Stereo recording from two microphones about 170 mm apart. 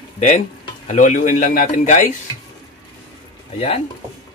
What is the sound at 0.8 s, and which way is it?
Speech, 45° left (ahead or behind).